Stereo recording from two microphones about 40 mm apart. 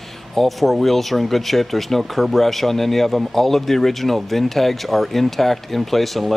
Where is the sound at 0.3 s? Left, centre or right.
Centre.